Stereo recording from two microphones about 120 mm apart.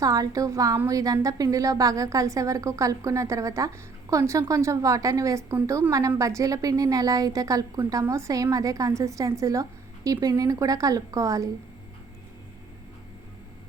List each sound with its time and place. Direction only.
0.0 s a woman's voice: 30° right (ahead or behind)